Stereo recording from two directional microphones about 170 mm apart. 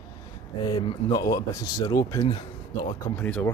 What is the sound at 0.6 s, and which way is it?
Speech, 30° left (ahead or behind).